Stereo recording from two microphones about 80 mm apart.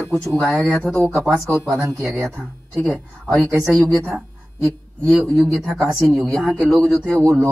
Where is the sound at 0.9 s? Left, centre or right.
Centre.